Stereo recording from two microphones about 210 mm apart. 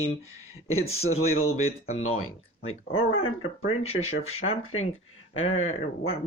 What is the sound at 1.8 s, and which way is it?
Speech, 75° left (ahead or behind).